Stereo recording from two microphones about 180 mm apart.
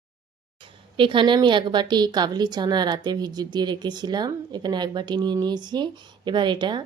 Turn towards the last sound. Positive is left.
turn(degrees=-25)  # may be behind; listen again after turning